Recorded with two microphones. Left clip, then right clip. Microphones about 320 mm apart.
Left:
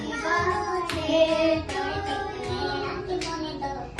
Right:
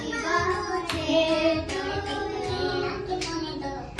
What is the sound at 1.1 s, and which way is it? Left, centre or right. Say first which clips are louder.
Child singing: left 1 dB; centre.